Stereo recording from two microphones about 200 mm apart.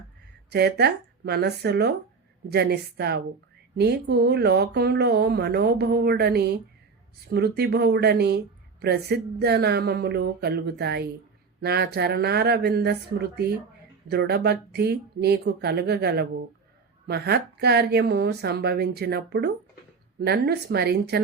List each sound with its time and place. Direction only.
0.5 s speech: 55° right (ahead or behind)